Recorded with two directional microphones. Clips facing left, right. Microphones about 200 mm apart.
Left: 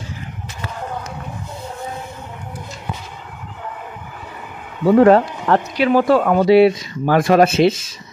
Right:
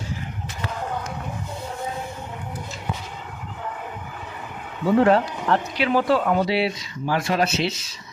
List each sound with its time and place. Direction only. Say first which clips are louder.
4.8 s speech: left 6 dB; 50° left (ahead or behind)